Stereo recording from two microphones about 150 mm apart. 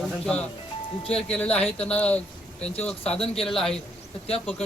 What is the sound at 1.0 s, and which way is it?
Speech, 5° left (ahead or behind).